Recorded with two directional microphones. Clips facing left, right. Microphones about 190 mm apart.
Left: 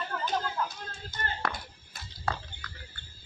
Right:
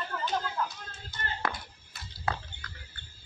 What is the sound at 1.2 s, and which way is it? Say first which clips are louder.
Music: left 2 dB; 45° left (ahead or behind).